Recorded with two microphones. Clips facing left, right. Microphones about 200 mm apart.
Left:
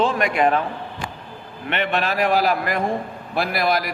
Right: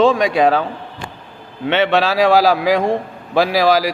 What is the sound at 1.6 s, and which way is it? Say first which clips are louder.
A man's voice: right 7 dB; 90° right.